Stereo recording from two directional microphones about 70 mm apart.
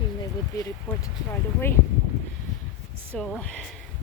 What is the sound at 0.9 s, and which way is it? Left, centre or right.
Speech, left.